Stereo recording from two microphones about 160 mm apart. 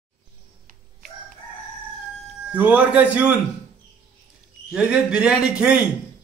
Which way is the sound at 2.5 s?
10° right (ahead or behind).